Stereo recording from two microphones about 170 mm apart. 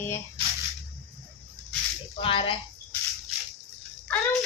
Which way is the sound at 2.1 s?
35° left (ahead or behind).